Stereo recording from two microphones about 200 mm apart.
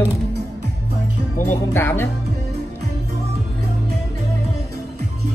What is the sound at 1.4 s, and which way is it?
Speech, 10° left (ahead or behind).